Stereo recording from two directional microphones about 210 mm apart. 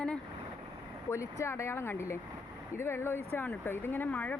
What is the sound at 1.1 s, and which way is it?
Speech, 15° left (ahead or behind).